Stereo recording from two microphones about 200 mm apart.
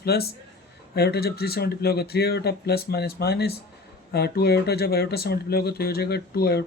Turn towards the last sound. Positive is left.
turn(degrees=55)  # may be behind; listen again after turning